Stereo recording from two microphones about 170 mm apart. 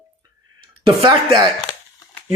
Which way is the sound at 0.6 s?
30° right (ahead or behind).